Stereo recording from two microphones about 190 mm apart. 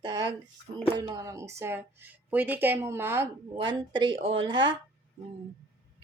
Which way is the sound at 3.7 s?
25° right (ahead or behind).